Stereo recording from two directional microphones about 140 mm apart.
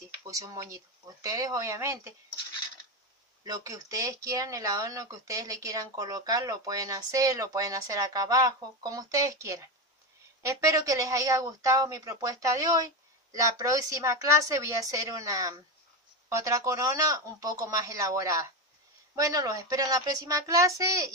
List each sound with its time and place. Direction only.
0.2 s speech: 25° right (ahead or behind)
3.4 s speech: 25° right (ahead or behind)